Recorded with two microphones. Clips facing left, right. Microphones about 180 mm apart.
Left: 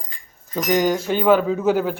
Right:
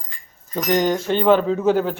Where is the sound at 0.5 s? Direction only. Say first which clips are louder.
Even; 5° left (ahead or behind).